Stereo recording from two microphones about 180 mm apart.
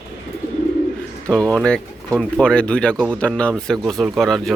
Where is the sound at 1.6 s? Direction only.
5° left (ahead or behind).